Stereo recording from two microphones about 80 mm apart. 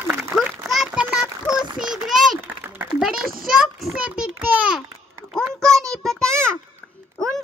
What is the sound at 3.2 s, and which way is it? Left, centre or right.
Child singing, centre.